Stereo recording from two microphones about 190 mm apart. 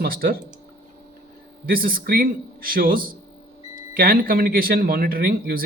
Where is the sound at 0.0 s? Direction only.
55° right (ahead or behind).